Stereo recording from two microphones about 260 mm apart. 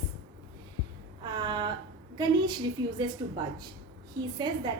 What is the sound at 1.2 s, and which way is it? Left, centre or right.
A woman's voice, centre.